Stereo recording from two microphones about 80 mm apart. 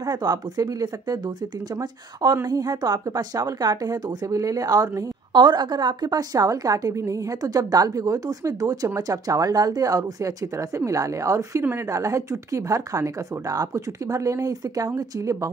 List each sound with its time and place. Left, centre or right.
0.0 s speech: right
2.4 s a woman's voice: right
5.3 s a woman's voice: right